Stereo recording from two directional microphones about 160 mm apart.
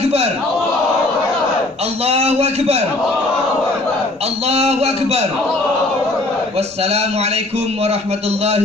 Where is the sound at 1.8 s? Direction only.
40° right (ahead or behind).